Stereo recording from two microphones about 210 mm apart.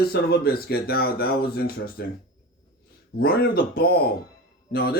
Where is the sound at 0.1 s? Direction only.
50° left (ahead or behind).